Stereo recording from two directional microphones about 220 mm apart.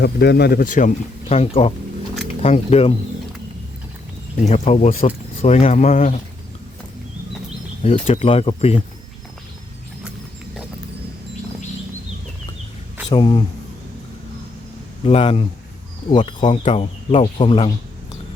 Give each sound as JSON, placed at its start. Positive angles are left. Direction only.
{"t": 0.0, "sound": "speech", "side_deg": 50}
{"t": 4.4, "sound": "speech", "side_deg": 30}
{"t": 8.0, "sound": "speech", "side_deg": 25}
{"t": 13.1, "sound": "speech", "side_deg": 20}
{"t": 15.0, "sound": "speech", "side_deg": 25}